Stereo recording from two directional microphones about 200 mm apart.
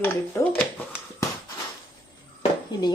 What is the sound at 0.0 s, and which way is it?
Speech, 10° left (ahead or behind).